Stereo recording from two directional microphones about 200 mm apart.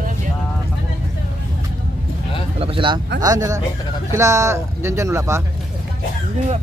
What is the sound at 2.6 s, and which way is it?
Speech, 25° right (ahead or behind).